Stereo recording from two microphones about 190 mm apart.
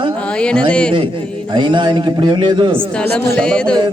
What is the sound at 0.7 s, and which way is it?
Speech, 5° left (ahead or behind).